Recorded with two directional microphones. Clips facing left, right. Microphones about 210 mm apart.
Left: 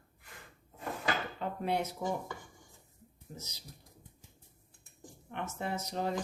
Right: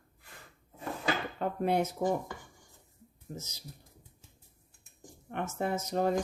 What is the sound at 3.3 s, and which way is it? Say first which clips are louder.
Speech: right 5 dB; 45° right (ahead or behind).